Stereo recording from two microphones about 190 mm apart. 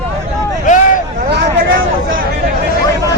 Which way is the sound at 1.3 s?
45° right (ahead or behind).